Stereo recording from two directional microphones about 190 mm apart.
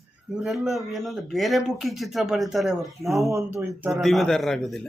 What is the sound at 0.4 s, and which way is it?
Speech, centre (ahead or behind).